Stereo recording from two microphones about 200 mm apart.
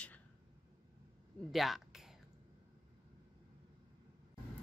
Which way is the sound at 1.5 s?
Centre (ahead or behind).